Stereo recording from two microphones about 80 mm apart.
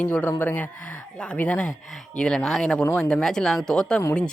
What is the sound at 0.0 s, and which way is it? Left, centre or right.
Speech, centre.